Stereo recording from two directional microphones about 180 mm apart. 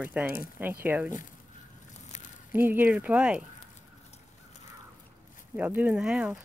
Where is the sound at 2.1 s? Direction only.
40° left (ahead or behind).